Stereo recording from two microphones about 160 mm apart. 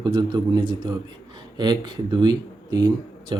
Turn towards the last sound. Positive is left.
turn(degrees=-30)  # may be behind; listen again after turning